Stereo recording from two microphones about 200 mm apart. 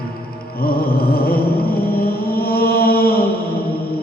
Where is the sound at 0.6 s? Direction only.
50° left (ahead or behind).